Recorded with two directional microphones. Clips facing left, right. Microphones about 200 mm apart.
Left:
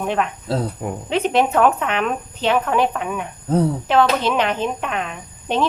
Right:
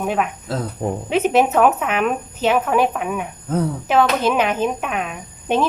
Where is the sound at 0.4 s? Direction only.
30° left (ahead or behind).